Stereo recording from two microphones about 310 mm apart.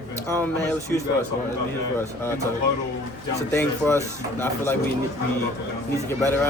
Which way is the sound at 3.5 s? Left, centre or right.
Centre.